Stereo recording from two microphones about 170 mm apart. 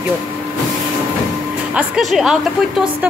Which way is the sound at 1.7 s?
Centre (ahead or behind).